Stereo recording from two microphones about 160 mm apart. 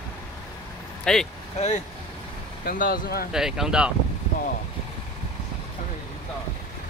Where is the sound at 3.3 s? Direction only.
5° right (ahead or behind).